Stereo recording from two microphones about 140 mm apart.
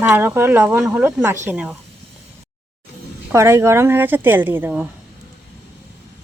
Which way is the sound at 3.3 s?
20° right (ahead or behind).